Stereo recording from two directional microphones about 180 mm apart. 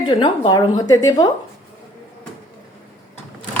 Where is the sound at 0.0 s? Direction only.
25° left (ahead or behind).